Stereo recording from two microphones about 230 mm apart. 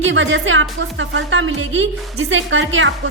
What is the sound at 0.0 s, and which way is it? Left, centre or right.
A woman's voice, right.